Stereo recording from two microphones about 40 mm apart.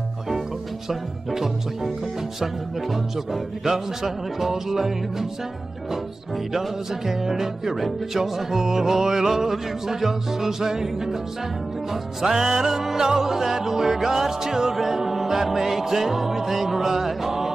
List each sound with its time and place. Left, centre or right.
0.8 s music: centre
3.6 s music: centre
6.5 s music: centre